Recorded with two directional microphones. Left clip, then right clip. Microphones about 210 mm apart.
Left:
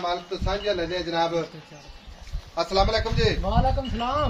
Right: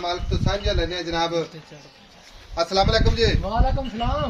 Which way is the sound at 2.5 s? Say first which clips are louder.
Right 2 dB; 40° right (ahead or behind).